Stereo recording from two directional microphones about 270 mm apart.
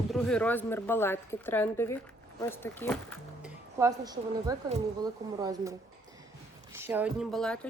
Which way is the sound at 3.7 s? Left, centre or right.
Centre.